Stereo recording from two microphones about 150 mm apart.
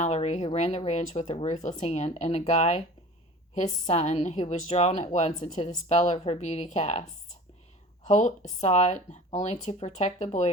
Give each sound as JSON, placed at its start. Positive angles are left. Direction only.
{"t": 0.0, "sound": "speech", "side_deg": 45}
{"t": 8.0, "sound": "speech", "side_deg": 50}